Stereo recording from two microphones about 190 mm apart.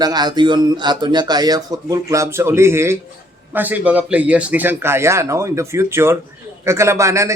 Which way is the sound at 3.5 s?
10° right (ahead or behind).